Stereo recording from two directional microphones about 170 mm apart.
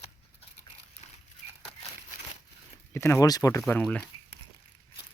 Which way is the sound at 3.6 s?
5° left (ahead or behind).